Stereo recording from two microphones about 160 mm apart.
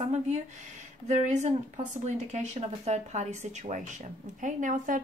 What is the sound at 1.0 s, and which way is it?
Speech, 45° right (ahead or behind).